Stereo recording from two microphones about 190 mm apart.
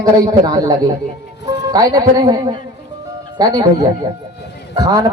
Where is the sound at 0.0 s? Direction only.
20° right (ahead or behind).